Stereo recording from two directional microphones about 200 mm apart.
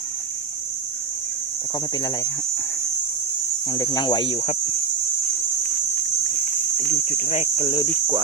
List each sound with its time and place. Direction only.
3.7 s speech: 20° left (ahead or behind)
6.7 s speech: 40° left (ahead or behind)